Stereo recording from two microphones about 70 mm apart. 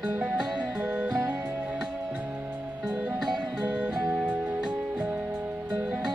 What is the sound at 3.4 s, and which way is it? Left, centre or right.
Music, centre.